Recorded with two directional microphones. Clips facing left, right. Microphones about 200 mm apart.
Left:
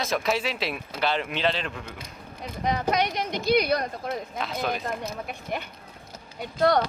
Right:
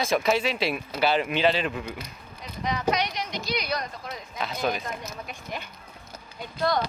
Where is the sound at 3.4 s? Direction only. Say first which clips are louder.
Left 9 dB; 55° left (ahead or behind).